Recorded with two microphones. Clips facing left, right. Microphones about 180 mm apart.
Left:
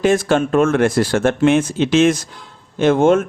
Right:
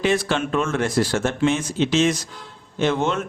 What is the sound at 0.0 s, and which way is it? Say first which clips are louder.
Speech: left 6 dB; 45° left (ahead or behind).